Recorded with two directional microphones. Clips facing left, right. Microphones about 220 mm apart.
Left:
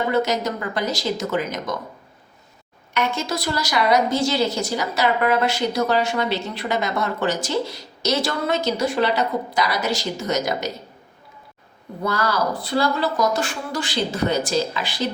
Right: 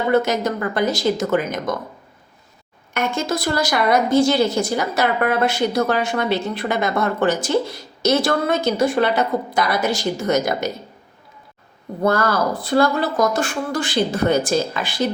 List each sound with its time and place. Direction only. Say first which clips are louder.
0.1 s a woman's voice: right 3 dB; 55° right (ahead or behind)
2.9 s a woman's voice: right 2 dB; 50° right (ahead or behind)
12.0 s a woman's voice: right 4 dB; 50° right (ahead or behind)